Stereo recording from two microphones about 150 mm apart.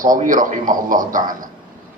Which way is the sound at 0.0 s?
65° right (ahead or behind).